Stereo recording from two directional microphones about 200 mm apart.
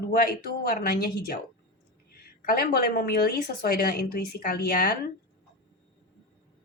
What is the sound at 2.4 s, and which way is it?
A woman's voice, 45° left (ahead or behind).